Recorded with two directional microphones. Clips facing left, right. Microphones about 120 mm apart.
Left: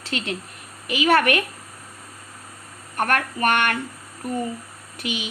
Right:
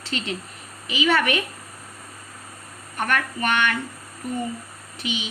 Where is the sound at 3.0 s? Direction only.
50° left (ahead or behind).